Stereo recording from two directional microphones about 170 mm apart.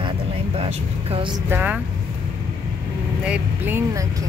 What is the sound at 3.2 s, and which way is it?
Speech, 10° right (ahead or behind).